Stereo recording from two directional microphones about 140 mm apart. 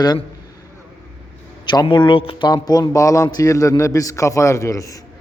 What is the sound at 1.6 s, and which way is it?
Speech, 35° left (ahead or behind).